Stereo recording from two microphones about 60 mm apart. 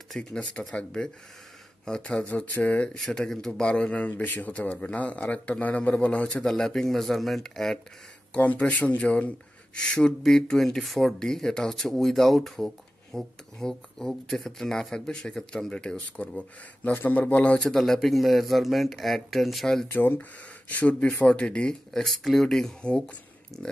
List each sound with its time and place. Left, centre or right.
0.1 s a man's voice: centre; by 2.9 s left
3.0 s a man's voice: centre
6.4 s speech: centre
8.3 s a man's voice: left
16.9 s a man's voice: left
17.6 s speech: centre
19.9 s a man's voice: left; by 23.1 s centre
23.5 s speech: centre